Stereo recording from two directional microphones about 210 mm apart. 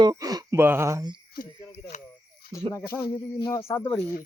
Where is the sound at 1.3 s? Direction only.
50° left (ahead or behind).